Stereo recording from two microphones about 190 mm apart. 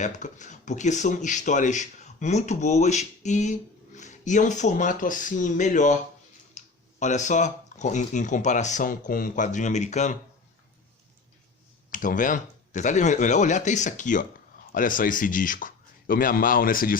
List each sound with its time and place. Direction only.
0.0 s speech: 40° left (ahead or behind)
6.6 s a sound: 35° left (ahead or behind)
7.0 s speech: 40° left (ahead or behind)
11.9 s speech: 45° left (ahead or behind)